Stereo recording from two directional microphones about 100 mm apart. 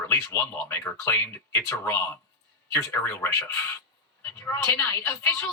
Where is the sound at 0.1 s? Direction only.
25° left (ahead or behind).